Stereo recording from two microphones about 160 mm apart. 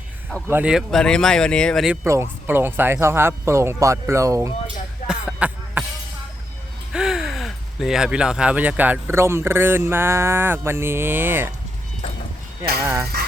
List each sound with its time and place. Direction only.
0.4 s speech: 10° right (ahead or behind)
2.0 s speech: 15° right (ahead or behind)
5.0 s a sound: 5° right (ahead or behind)
6.9 s speech: 5° right (ahead or behind)
12.8 s speech: 15° right (ahead or behind)